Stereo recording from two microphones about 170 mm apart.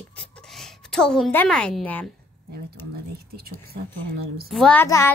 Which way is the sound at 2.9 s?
65° right (ahead or behind).